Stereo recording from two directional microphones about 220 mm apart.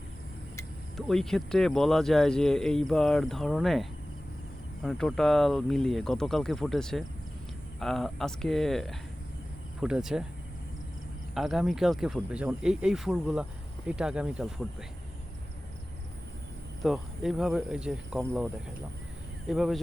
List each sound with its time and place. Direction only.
0.9 s speech: centre (ahead or behind)
11.3 s speech: centre (ahead or behind)
16.8 s speech: centre (ahead or behind)
19.5 s speech: centre (ahead or behind)